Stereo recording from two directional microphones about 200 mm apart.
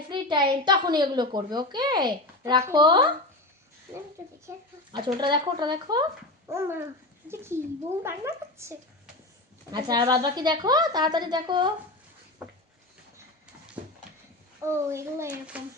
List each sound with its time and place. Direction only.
0.1 s a woman's voice: 25° right (ahead or behind)
4.4 s a woman's voice: 25° right (ahead or behind)
12.4 s a sound: 10° right (ahead or behind)
14.6 s a child's voice: 15° right (ahead or behind)